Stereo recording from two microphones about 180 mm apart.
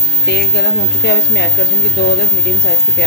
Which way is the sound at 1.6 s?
65° left (ahead or behind).